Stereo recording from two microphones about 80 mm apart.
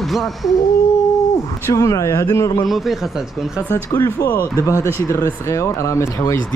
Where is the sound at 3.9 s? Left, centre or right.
Left.